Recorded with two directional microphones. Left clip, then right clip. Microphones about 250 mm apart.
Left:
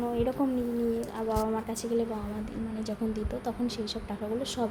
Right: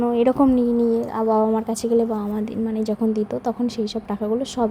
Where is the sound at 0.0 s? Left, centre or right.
Right.